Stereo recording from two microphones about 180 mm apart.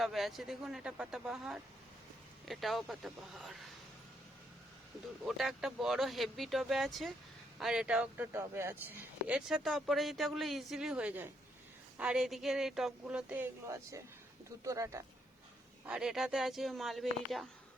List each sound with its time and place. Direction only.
0.0 s speech: centre (ahead or behind)
5.2 s speech: centre (ahead or behind)
15.9 s speech: 5° right (ahead or behind)